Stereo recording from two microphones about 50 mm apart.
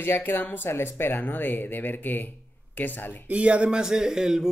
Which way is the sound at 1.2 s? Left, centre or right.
Left.